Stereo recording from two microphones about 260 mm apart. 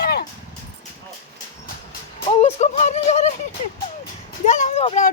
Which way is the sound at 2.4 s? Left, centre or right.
Left.